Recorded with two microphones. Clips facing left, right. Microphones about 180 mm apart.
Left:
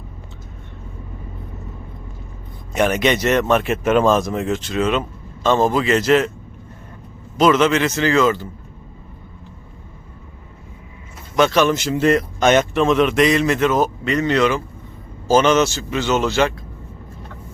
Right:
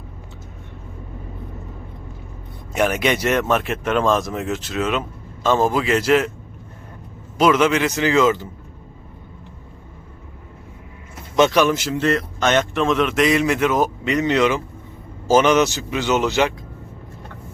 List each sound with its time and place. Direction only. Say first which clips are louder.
2.7 s speech: left 2 dB; 5° right (ahead or behind)
7.3 s speech: left 1 dB; 10° right (ahead or behind)
11.3 s speech: even; 20° right (ahead or behind)
11.6 s speech: left 1 dB; 5° right (ahead or behind)
11.9 s speech: left 4 dB; 15° left (ahead or behind)
12.7 s speech: left 3 dB; centre (ahead or behind); by 16.6 s 15° right (ahead or behind)